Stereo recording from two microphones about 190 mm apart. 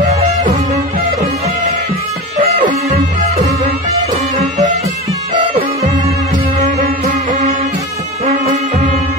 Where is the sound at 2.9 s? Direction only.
40° right (ahead or behind).